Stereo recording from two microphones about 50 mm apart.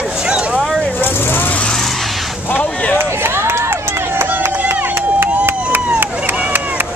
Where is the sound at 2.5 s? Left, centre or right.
Left.